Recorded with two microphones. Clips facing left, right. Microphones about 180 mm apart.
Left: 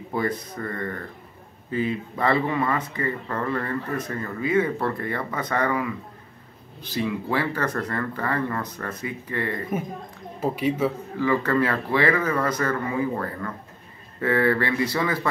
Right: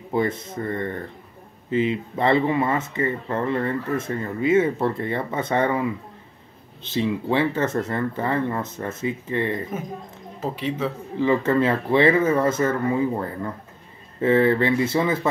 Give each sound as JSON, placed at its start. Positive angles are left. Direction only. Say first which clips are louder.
{"t": 0.1, "sound": "speech", "louder": "right 3 dB", "side_deg": -25}
{"t": 10.4, "sound": "speech", "louder": "left 3 dB", "side_deg": 10}
{"t": 11.1, "sound": "speech", "louder": "right 3 dB", "side_deg": -20}
{"t": 14.2, "sound": "speech", "louder": "right 4 dB", "side_deg": -20}